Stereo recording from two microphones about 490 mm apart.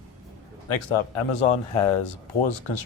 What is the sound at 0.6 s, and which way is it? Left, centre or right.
Speech, left.